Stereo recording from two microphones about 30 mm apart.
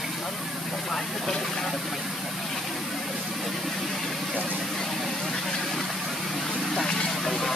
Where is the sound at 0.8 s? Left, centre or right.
Centre.